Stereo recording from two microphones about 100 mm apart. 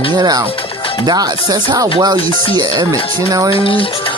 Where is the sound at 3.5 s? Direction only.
65° left (ahead or behind).